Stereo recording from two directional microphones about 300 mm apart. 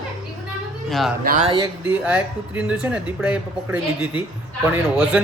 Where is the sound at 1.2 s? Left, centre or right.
Right.